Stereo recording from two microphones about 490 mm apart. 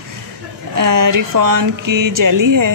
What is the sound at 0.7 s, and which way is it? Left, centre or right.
Speech, right.